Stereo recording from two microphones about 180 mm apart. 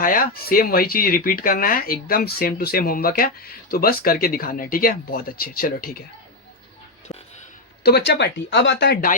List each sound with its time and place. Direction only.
0.0 s speech: 50° left (ahead or behind)
7.9 s speech: 65° left (ahead or behind)